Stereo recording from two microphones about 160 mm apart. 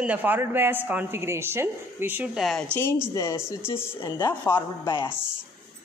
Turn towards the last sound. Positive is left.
turn(degrees=30)  # may be behind; listen again after turning